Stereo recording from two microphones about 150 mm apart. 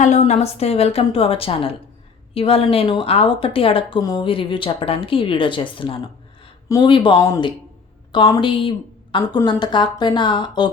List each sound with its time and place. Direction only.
0.0 s a woman's voice: 50° left (ahead or behind); by 10.7 s 30° left (ahead or behind)